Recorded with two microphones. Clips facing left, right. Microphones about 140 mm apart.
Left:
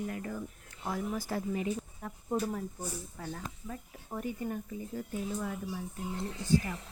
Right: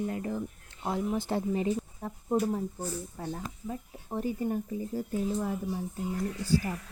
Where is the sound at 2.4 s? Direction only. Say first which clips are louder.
Right 6 dB; 15° right (ahead or behind).